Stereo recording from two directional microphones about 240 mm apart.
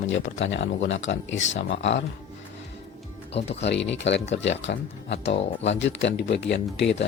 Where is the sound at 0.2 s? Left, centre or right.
Left.